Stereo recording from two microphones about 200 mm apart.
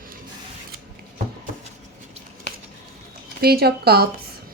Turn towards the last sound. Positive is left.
turn(degrees=-50)  # may be behind; listen again after turning